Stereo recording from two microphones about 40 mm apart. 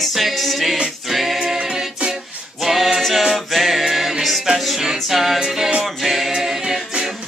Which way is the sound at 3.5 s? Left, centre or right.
Centre.